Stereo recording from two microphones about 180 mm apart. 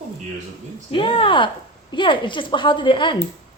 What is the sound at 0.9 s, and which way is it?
Speech, 30° left (ahead or behind).